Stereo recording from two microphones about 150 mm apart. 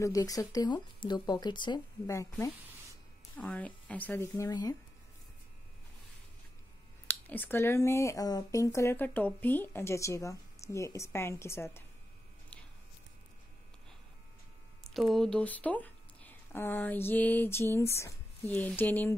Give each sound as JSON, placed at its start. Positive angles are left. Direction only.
{"t": 0.0, "sound": "speech", "side_deg": 25}
{"t": 2.0, "sound": "speech", "side_deg": 20}
{"t": 7.1, "sound": "speech", "side_deg": 10}
{"t": 14.8, "sound": "speech", "side_deg": 0}